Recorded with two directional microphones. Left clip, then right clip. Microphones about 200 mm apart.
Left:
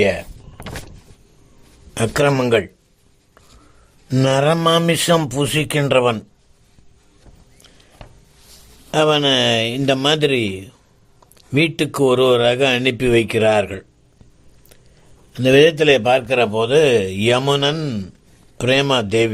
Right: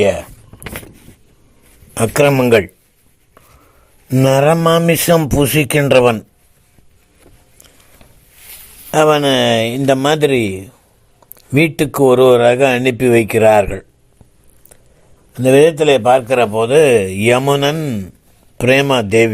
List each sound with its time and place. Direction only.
1.9 s a man's voice: 20° right (ahead or behind)
4.1 s a man's voice: 20° right (ahead or behind)
8.9 s a man's voice: 20° right (ahead or behind)
15.3 s a man's voice: 15° right (ahead or behind)